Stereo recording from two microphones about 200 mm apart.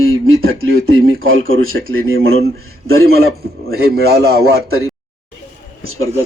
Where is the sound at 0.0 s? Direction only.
90° right.